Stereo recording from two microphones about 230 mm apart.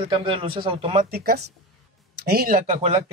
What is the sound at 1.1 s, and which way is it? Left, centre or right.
Speech, right.